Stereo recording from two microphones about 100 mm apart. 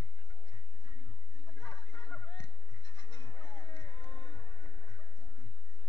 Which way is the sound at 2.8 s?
40° left (ahead or behind).